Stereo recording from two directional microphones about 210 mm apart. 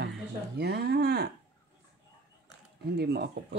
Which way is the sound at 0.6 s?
50° right (ahead or behind).